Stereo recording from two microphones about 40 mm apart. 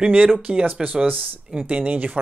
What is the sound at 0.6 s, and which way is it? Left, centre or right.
Speech, right.